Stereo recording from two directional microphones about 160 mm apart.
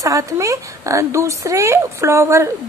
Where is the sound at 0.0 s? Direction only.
20° right (ahead or behind).